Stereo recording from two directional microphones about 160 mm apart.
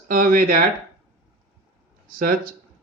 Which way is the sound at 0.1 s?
60° right (ahead or behind).